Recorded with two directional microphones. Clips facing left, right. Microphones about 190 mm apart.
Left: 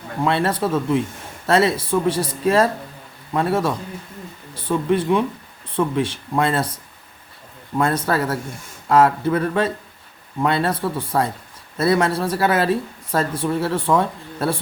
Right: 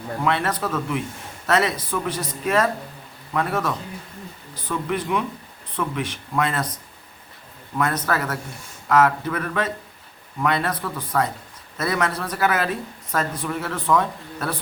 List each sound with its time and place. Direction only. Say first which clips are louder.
0.3 s speech: left 4 dB; 30° left (ahead or behind)
7.8 s speech: left 4 dB; 30° left (ahead or behind)